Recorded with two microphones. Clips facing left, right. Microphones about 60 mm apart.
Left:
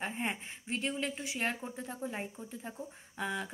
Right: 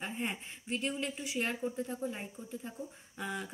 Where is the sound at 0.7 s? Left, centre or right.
Left.